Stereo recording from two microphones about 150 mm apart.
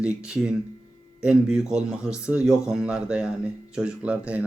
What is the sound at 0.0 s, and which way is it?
A man's voice, 5° right (ahead or behind).